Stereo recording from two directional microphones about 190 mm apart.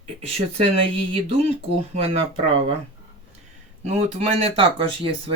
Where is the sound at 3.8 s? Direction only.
30° right (ahead or behind).